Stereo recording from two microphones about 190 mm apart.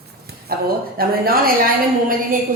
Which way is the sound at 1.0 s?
50° right (ahead or behind).